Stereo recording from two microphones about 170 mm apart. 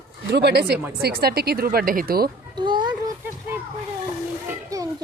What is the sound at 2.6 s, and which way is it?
Chicken, 25° right (ahead or behind).